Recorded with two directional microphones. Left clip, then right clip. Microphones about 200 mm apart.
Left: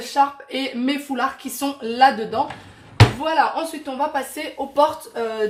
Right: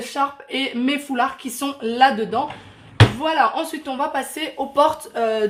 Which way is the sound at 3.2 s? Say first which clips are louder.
Right 1 dB; 40° right (ahead or behind).